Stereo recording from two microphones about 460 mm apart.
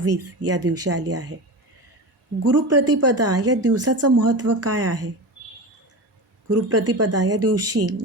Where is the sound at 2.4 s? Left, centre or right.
Right.